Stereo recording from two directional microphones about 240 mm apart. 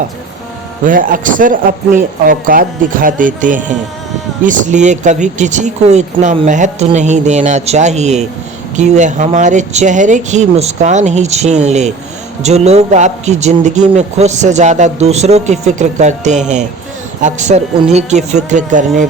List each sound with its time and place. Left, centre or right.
0.9 s a man's voice: right